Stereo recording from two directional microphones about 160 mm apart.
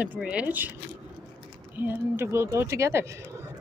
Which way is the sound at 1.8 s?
15° right (ahead or behind).